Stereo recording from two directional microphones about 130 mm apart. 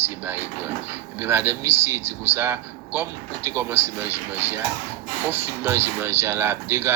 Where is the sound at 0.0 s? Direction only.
15° right (ahead or behind).